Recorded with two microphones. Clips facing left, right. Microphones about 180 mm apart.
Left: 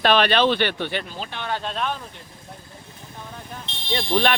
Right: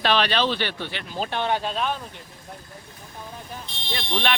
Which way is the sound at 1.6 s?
Centre (ahead or behind).